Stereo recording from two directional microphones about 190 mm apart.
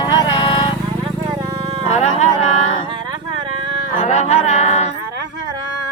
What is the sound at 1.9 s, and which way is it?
Speech, 35° left (ahead or behind).